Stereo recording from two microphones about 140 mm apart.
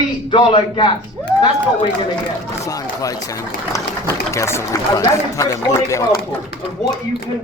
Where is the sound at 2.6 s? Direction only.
25° left (ahead or behind).